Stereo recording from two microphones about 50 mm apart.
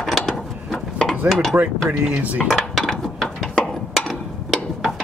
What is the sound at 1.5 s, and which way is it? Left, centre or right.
Speech, right.